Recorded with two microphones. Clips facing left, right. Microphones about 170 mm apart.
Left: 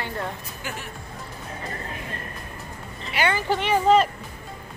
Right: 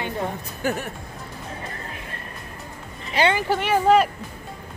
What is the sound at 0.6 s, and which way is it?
Speech, 45° right (ahead or behind).